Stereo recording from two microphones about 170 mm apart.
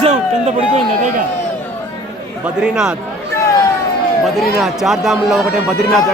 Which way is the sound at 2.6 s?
5° right (ahead or behind).